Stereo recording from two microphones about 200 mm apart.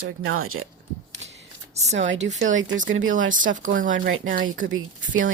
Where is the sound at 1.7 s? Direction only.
35° right (ahead or behind).